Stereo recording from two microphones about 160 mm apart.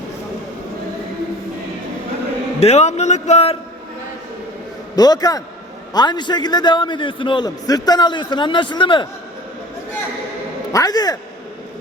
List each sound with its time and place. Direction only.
2.6 s a man's voice: 45° left (ahead or behind)
4.9 s a man's voice: 25° left (ahead or behind)
10.7 s a man's voice: 20° left (ahead or behind)